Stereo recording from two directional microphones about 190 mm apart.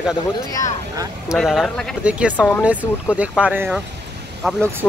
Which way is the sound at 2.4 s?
5° left (ahead or behind).